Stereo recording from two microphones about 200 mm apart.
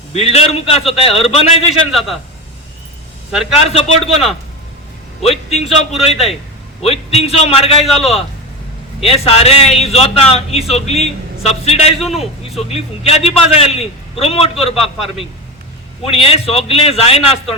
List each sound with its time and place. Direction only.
0.1 s a man's voice: 30° left (ahead or behind)
1.9 s speech: centre (ahead or behind)
3.5 s a man's voice: 30° left (ahead or behind)
4.1 s speech: centre (ahead or behind)
5.2 s a man's voice: 30° left (ahead or behind)
5.6 s speech: centre (ahead or behind)
6.8 s a man's voice: 30° left (ahead or behind)
7.9 s speech: centre (ahead or behind)
9.0 s a man's voice: 30° left (ahead or behind)
11.9 s speech: centre (ahead or behind)
13.1 s a man's voice: 30° left (ahead or behind)
16.0 s a man's voice: 30° left (ahead or behind)